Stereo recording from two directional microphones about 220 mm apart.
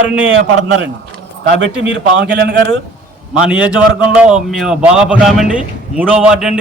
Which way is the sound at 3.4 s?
5° right (ahead or behind).